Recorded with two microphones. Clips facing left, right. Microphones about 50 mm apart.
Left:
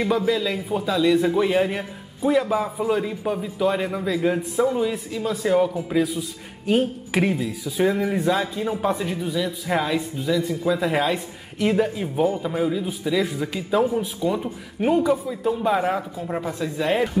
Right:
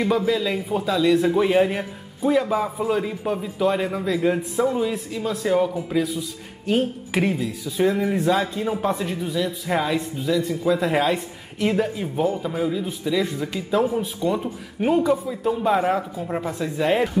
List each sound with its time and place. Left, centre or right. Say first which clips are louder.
0.0 s a man's voice: even; centre